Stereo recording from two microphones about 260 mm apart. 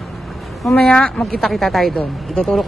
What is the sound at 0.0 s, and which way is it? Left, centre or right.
A woman's voice, centre.